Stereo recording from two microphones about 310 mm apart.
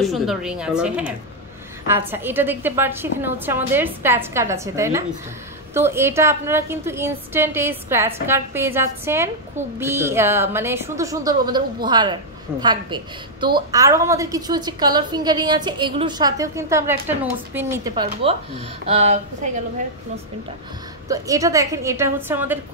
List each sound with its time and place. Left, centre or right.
0.0 s a woman's voice: centre
21.1 s a woman's voice: centre